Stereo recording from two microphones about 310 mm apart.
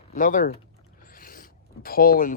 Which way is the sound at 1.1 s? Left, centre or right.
Left.